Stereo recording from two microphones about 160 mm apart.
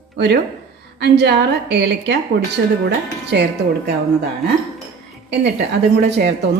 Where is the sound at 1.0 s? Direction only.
90° right.